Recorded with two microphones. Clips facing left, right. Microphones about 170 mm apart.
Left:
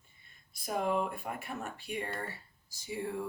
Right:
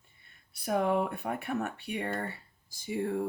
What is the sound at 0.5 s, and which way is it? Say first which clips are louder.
Speech: right 4 dB; 65° right (ahead or behind).